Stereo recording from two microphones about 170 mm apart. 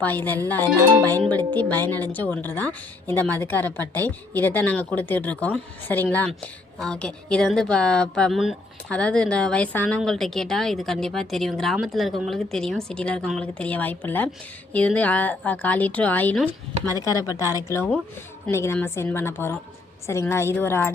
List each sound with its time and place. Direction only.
0.0 s a woman's voice: 10° left (ahead or behind)
17.0 s a woman's voice: 20° left (ahead or behind)